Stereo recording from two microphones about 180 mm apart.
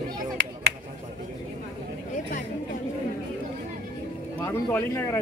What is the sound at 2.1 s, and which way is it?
Chatter, 45° left (ahead or behind).